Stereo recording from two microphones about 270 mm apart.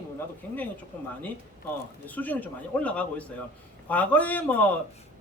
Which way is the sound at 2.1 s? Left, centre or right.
Centre.